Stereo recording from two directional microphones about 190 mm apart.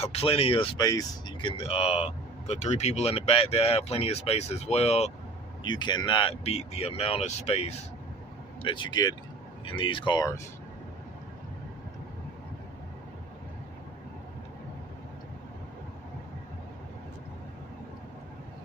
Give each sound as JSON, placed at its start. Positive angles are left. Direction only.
{"t": 0.0, "sound": "speech", "side_deg": 30}
{"t": 5.6, "sound": "speech", "side_deg": 25}